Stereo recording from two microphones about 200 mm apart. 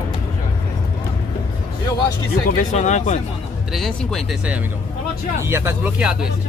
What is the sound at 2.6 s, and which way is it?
Speech, 35° left (ahead or behind).